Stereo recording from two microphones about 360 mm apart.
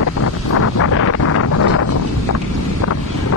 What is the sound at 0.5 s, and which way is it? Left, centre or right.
Wind noise, left.